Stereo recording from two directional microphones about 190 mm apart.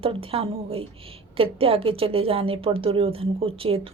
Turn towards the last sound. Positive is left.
turn(degrees=-30)  # may be behind; listen again after turning